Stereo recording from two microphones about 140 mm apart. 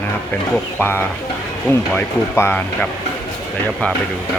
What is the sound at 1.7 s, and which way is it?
Speech, 15° left (ahead or behind).